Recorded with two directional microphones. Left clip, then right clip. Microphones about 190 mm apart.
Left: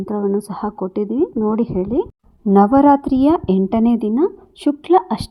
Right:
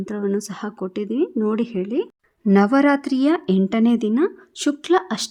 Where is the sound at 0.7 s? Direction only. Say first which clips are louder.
Left 5 dB; 25° right (ahead or behind).